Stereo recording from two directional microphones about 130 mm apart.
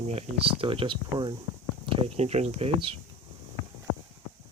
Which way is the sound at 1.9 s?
55° right (ahead or behind).